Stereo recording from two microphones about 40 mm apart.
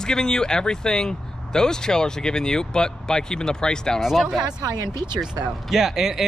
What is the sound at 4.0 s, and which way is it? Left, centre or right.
Speech, centre.